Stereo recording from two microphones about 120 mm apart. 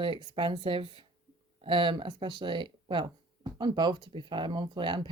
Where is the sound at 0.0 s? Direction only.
40° right (ahead or behind).